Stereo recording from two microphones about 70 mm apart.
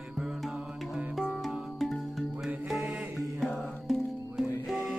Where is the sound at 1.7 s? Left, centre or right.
Centre.